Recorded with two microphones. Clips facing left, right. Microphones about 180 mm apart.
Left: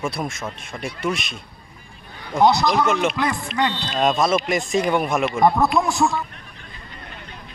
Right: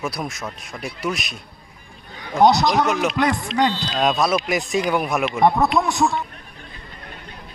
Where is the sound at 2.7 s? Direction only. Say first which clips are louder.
Even; centre (ahead or behind).